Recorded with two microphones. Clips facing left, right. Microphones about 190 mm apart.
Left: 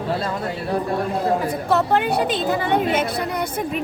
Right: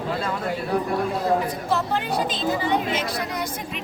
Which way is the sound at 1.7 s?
60° left (ahead or behind).